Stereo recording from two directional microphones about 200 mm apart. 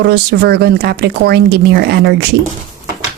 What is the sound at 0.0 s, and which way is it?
Speech, 55° right (ahead or behind).